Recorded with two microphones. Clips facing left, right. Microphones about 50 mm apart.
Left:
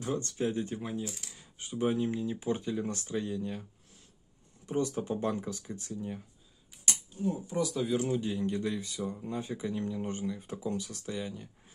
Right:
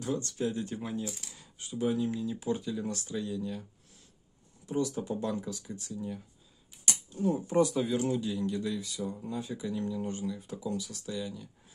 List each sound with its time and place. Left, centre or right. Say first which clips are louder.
0.0 s speech: even; left
0.7 s speech: right 1 dB; centre
1.6 s speech: even; left
4.6 s speech: even; left
7.2 s speech: right 4 dB; right
7.7 s speech: right 1 dB; centre
8.2 s speech: even; left